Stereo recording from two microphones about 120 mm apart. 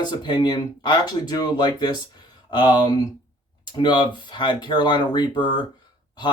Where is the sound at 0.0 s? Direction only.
35° left (ahead or behind).